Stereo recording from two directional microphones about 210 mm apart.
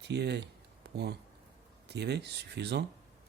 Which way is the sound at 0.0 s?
55° right (ahead or behind).